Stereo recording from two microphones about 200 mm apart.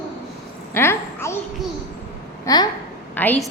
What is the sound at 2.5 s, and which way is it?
A woman's voice, 15° left (ahead or behind).